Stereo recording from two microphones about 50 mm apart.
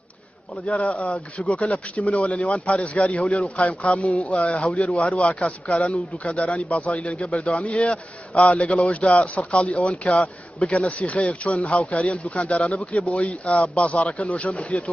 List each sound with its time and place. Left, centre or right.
0.7 s a man's voice: left